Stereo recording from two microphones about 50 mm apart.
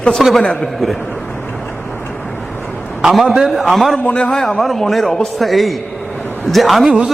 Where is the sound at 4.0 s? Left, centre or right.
Left.